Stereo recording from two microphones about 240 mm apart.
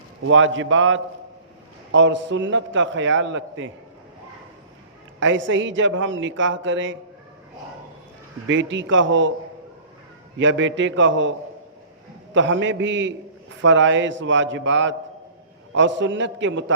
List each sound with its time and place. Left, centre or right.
0.3 s a man's voice: right
5.2 s a man's voice: right
8.7 s a man's voice: right
10.3 s a man's voice: right